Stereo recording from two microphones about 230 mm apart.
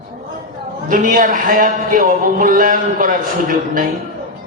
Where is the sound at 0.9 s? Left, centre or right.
Right.